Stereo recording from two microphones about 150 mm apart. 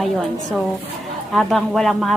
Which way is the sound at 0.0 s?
Centre (ahead or behind).